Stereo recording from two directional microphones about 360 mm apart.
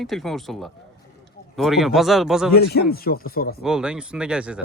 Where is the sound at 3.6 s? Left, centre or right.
Centre.